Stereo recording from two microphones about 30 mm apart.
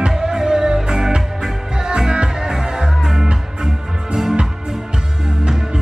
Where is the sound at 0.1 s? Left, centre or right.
Centre.